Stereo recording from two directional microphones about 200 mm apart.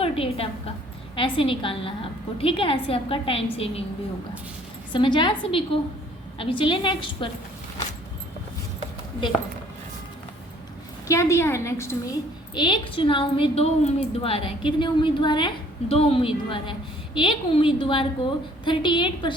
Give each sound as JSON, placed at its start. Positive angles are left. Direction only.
{"t": 0.0, "sound": "a woman's voice", "side_deg": 30}
{"t": 4.9, "sound": "a woman's voice", "side_deg": 25}
{"t": 6.4, "sound": "a woman's voice", "side_deg": 25}
{"t": 11.1, "sound": "a woman's voice", "side_deg": 15}